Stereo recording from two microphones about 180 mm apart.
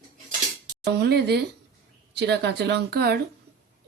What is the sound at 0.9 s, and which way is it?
A woman's voice, 65° right (ahead or behind).